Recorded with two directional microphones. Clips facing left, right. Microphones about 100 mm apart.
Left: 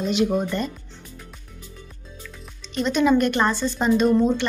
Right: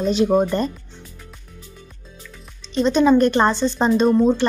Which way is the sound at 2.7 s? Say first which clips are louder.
Right 4 dB; 30° right (ahead or behind).